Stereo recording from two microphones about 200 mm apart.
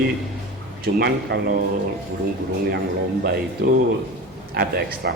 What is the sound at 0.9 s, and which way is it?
Speech, 50° right (ahead or behind).